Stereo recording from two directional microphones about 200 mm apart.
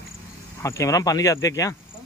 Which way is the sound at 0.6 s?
15° left (ahead or behind).